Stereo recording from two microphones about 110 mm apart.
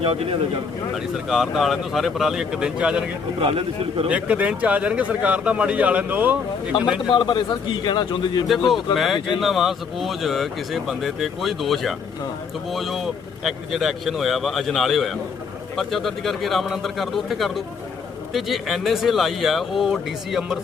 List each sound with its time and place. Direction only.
0.0 s speech: 55° right (ahead or behind)
1.1 s speech: 5° right (ahead or behind)
3.4 s speech: 55° right (ahead or behind)
4.1 s speech: 15° right (ahead or behind)
7.1 s a man's voice: 45° left (ahead or behind)
8.7 s speech: centre (ahead or behind)